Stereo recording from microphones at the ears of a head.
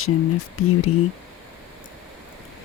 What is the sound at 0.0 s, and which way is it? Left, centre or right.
Speech, left.